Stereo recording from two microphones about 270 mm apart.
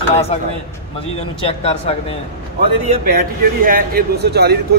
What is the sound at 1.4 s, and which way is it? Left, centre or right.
Speech, left.